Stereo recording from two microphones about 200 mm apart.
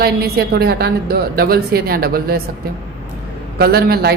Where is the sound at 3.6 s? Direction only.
50° right (ahead or behind).